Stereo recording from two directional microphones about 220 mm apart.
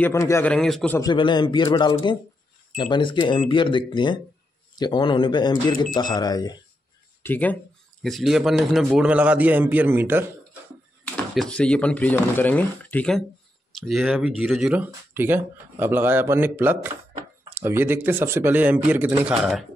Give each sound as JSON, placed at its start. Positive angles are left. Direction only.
{"t": 0.0, "sound": "a man's voice", "side_deg": 10}
{"t": 0.9, "sound": "speech", "side_deg": 20}
{"t": 7.2, "sound": "a man's voice", "side_deg": 5}
{"t": 11.3, "sound": "a man's voice", "side_deg": 5}